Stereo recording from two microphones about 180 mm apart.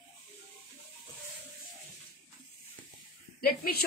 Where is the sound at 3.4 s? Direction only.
60° left (ahead or behind).